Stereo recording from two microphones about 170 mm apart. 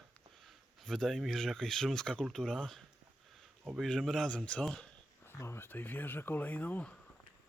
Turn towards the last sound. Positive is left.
turn(degrees=10)  # may be behind; listen again after turning